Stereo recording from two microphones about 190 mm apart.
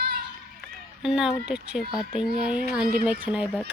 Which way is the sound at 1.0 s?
Centre (ahead or behind).